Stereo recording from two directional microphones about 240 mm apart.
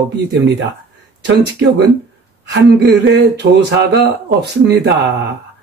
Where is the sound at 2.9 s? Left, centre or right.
Right.